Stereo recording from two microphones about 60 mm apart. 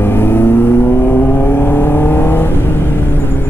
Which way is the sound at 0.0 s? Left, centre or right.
Left.